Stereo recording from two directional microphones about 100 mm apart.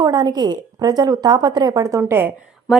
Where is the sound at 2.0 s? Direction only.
20° right (ahead or behind).